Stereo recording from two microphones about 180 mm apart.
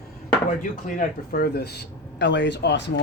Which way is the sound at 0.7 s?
55° left (ahead or behind).